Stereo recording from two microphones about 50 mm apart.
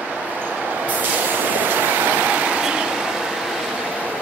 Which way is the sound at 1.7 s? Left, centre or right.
Right.